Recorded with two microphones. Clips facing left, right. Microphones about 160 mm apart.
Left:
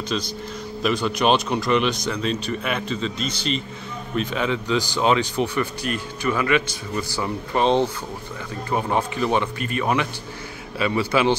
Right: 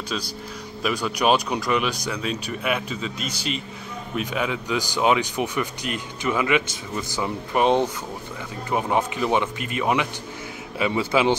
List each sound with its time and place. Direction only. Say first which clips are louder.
0.1 s speech: left 4 dB; 5° right (ahead or behind)